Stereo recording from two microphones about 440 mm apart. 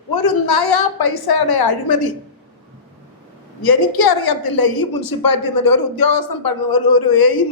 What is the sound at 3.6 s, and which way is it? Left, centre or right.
A woman's voice, left.